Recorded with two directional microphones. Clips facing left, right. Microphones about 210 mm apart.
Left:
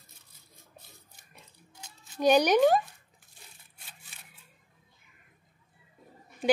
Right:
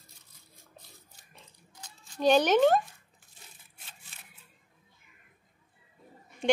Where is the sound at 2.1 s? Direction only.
10° left (ahead or behind).